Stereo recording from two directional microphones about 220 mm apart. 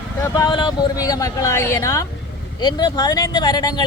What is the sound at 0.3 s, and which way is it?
Speech, 20° left (ahead or behind).